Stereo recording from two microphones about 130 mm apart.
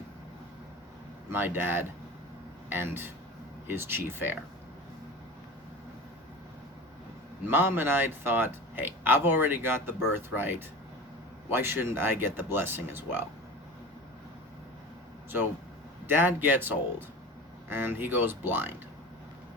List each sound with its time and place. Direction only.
1.3 s speech: 15° right (ahead or behind)
7.4 s speech: 15° right (ahead or behind)
16.0 s speech: 15° right (ahead or behind)